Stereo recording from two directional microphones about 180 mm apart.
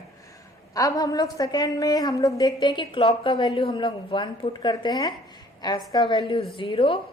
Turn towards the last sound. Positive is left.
turn(degrees=30)  # may be behind; listen again after turning